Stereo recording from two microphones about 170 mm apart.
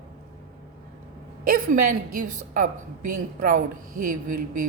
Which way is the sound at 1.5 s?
50° right (ahead or behind).